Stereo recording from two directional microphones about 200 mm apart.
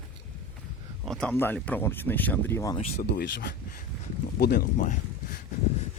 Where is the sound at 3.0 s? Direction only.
50° left (ahead or behind).